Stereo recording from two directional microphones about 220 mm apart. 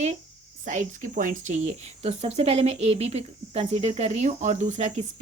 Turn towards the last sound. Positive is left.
turn(degrees=-30)  # may be behind; listen again after turning